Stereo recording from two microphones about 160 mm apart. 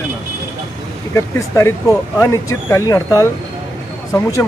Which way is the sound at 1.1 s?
20° left (ahead or behind).